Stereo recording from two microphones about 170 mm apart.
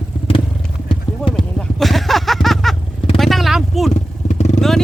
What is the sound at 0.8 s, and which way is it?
Clip-clop, 30° left (ahead or behind).